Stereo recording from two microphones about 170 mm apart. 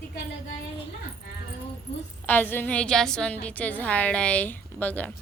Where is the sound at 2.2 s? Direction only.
10° left (ahead or behind).